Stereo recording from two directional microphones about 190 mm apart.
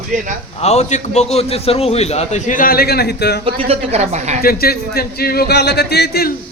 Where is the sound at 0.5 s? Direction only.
35° left (ahead or behind); by 3.4 s 60° left (ahead or behind).